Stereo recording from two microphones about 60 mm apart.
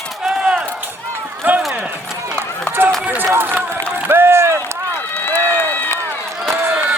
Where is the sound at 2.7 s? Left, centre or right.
Right.